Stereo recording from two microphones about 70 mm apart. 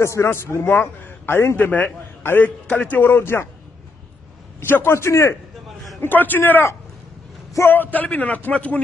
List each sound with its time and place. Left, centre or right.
0.0 s a man's voice: left
0.7 s a man's voice: left
1.6 s a man's voice: left
4.6 s a man's voice: left
5.9 s a man's voice: left